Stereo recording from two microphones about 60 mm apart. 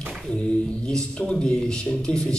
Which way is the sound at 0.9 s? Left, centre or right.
Centre.